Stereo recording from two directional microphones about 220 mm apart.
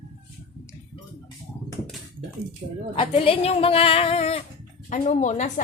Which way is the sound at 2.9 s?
25° left (ahead or behind).